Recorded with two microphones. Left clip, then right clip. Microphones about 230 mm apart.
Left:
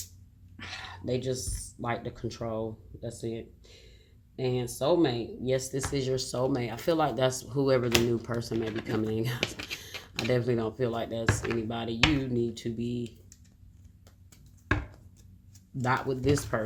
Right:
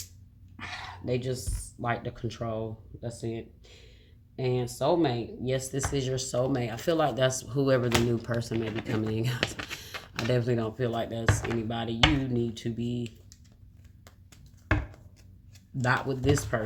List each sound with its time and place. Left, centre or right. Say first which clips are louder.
0.5 s a sound: right 2 dB; right
1.8 s speech: right 2 dB; right
9.4 s speech: right 1 dB; centre
9.8 s speech: even; right
15.9 s speech: right 1 dB; right